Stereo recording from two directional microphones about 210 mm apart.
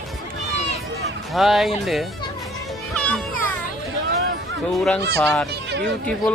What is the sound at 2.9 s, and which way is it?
Music, 5° left (ahead or behind).